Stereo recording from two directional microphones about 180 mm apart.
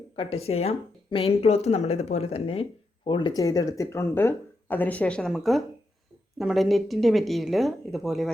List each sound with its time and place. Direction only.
0.2 s speech: 35° left (ahead or behind); by 8.3 s centre (ahead or behind)